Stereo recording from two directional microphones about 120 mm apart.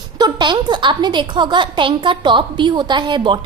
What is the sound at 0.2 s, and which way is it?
A woman's voice, 40° right (ahead or behind).